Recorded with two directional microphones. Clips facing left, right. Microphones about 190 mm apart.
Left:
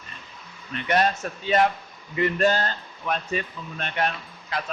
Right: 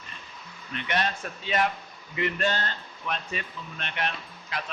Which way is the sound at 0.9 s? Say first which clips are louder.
Left 7 dB; 40° left (ahead or behind).